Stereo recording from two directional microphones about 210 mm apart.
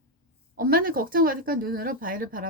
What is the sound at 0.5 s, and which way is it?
A woman's voice, 45° right (ahead or behind).